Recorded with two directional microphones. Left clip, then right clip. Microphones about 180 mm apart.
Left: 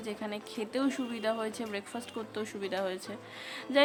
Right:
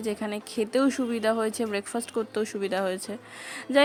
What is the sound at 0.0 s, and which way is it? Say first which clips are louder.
A woman's voice: right 7 dB; 35° right (ahead or behind).